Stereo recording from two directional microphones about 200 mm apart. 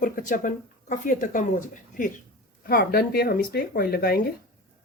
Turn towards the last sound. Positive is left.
turn(degrees=50)  # may be behind; listen again after turning